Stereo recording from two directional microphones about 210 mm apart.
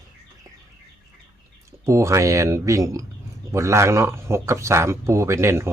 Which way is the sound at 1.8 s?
15° right (ahead or behind).